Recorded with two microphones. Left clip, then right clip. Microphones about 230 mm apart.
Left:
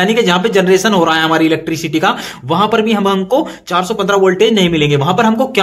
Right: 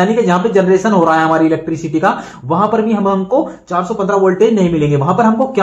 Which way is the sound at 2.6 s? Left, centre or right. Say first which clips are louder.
Left 1 dB; left.